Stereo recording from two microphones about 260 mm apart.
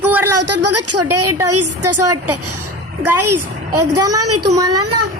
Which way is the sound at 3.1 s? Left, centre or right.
Right.